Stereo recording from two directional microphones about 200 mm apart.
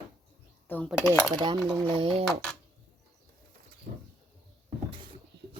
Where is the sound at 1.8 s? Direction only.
25° right (ahead or behind).